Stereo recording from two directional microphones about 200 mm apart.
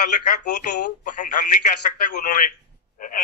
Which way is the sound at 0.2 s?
40° left (ahead or behind).